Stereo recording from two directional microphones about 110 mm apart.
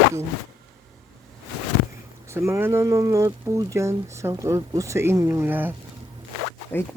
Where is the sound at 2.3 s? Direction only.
25° right (ahead or behind).